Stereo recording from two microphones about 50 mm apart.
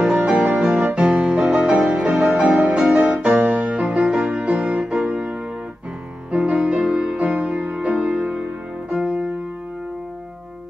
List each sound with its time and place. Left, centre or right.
0.0 s music: centre
0.7 s music: right
7.2 s music: right